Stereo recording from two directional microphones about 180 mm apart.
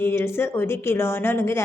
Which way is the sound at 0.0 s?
15° left (ahead or behind).